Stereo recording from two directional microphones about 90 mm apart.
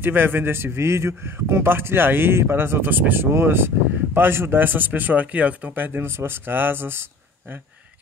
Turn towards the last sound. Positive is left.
turn(degrees=-25)  # may be behind; listen again after turning